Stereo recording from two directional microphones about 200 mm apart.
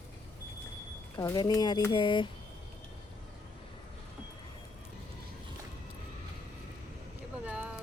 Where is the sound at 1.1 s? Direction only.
20° left (ahead or behind).